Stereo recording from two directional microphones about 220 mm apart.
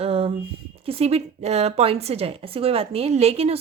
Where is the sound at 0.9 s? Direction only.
25° right (ahead or behind).